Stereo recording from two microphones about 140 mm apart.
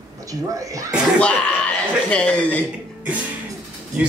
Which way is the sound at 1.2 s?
10° left (ahead or behind).